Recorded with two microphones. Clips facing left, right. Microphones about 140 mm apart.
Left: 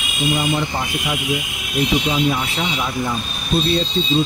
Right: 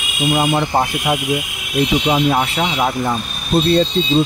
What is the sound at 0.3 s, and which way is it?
Speech, 55° right (ahead or behind).